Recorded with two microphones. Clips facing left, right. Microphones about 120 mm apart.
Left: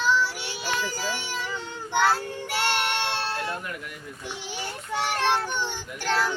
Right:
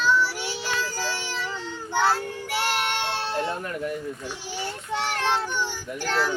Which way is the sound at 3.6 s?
35° right (ahead or behind).